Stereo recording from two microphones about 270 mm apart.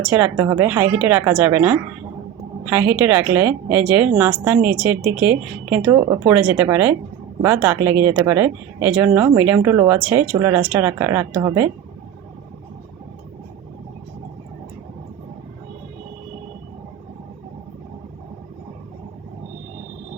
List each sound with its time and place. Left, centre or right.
0.1 s speech: centre